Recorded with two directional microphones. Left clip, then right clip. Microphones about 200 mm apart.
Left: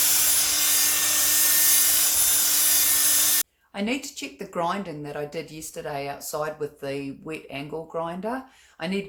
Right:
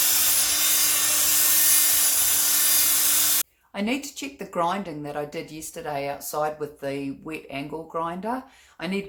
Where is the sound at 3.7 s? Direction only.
Centre (ahead or behind).